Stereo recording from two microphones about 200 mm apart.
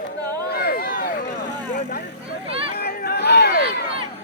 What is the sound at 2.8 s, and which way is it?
Chatter, 50° left (ahead or behind).